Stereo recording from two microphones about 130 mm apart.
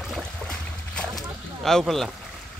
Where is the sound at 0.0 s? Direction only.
5° left (ahead or behind).